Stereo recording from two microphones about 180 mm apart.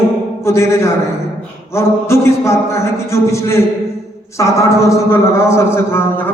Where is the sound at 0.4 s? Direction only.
15° left (ahead or behind).